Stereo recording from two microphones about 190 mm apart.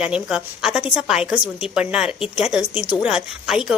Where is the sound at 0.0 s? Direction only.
5° right (ahead or behind).